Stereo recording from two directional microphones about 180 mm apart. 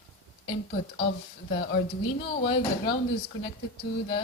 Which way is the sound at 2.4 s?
30° left (ahead or behind).